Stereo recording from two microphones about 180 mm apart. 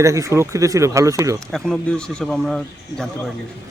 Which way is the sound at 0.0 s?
15° right (ahead or behind).